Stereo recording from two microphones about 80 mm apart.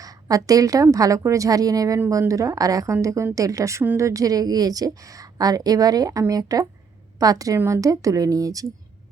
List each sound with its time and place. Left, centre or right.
0.0 s a woman's voice: right